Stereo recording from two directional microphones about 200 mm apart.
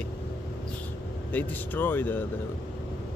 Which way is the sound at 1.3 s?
10° left (ahead or behind).